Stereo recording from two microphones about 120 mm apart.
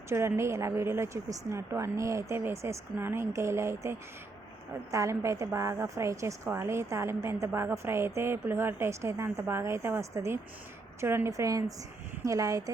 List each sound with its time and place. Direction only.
0.1 s a woman's voice: 25° right (ahead or behind)